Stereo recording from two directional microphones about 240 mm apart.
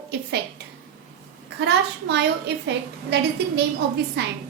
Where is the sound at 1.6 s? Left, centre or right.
Right.